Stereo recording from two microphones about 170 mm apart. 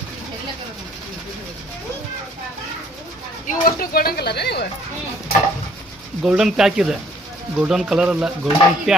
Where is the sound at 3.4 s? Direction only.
55° left (ahead or behind); by 4.7 s 75° left (ahead or behind).